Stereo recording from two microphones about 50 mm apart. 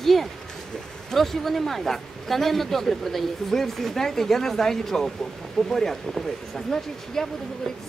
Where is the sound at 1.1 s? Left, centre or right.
Centre.